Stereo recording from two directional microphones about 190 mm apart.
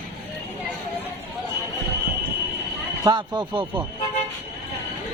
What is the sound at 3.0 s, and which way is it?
Speech, 25° right (ahead or behind).